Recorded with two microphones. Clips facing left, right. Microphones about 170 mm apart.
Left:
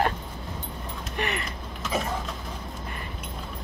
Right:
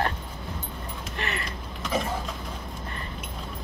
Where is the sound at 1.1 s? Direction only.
15° left (ahead or behind).